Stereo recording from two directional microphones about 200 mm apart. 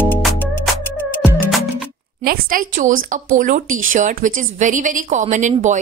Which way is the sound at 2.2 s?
45° right (ahead or behind).